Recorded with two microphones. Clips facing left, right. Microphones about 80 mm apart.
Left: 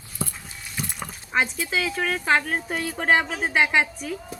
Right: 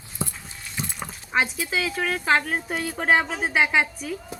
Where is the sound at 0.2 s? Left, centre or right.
Right.